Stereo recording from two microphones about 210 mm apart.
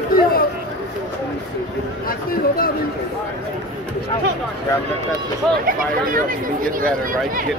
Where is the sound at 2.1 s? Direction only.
45° left (ahead or behind).